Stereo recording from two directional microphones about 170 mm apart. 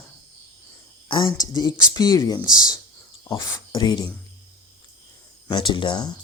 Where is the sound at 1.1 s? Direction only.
25° left (ahead or behind).